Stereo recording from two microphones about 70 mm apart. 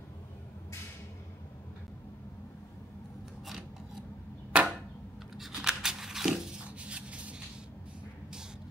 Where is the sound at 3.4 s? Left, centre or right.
Centre.